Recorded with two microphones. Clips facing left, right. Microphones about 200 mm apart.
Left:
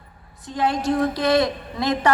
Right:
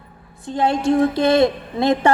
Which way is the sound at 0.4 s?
25° right (ahead or behind).